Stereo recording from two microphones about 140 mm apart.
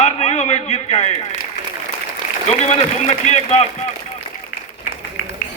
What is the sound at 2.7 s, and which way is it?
Speech, 50° left (ahead or behind).